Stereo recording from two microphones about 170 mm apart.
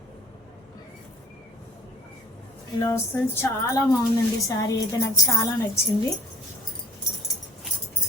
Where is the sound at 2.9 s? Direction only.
15° left (ahead or behind).